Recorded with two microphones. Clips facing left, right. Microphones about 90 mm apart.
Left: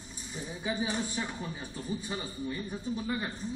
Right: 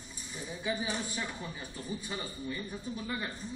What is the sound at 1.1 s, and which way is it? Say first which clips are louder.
A man's voice: left 2 dB; 20° left (ahead or behind).